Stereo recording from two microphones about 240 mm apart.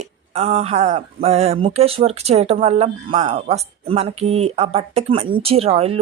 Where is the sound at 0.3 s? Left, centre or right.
Right.